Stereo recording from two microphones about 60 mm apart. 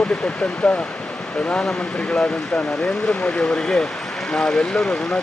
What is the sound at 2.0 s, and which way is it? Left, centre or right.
Speech, left.